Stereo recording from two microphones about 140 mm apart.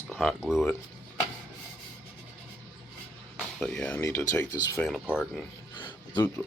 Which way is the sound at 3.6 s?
5° left (ahead or behind).